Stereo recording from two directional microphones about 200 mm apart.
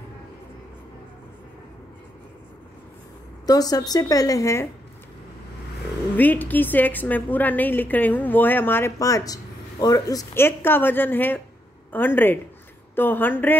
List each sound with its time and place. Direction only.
3.4 s a woman's voice: 20° left (ahead or behind)
6.1 s a woman's voice: 10° left (ahead or behind)